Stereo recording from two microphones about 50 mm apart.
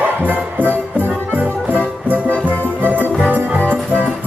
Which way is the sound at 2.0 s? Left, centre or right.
Right.